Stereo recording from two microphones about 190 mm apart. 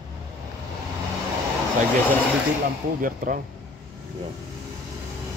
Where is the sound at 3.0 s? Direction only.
45° right (ahead or behind).